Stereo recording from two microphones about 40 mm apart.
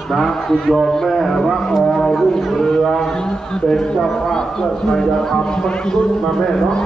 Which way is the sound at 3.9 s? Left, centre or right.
Centre.